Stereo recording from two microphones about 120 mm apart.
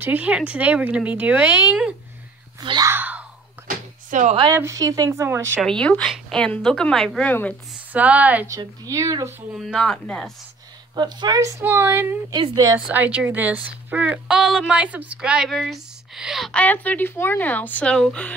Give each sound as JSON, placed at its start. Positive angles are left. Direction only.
{"t": 0.0, "sound": "speech", "side_deg": -10}
{"t": 2.8, "sound": "a sound", "side_deg": -15}
{"t": 4.1, "sound": "a woman's voice", "side_deg": -90}
{"t": 4.6, "sound": "a woman's voice", "side_deg": -25}
{"t": 5.6, "sound": "speech", "side_deg": 5}
{"t": 7.9, "sound": "speech", "side_deg": -15}
{"t": 8.5, "sound": "a woman's voice", "side_deg": -30}
{"t": 9.5, "sound": "speech", "side_deg": 0}
{"t": 11.0, "sound": "a woman's voice", "side_deg": -35}
{"t": 16.5, "sound": "speech", "side_deg": 15}